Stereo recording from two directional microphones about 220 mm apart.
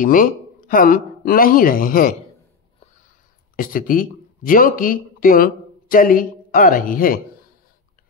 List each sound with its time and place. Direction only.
0.0 s speech: 40° left (ahead or behind)
3.5 s speech: 40° left (ahead or behind)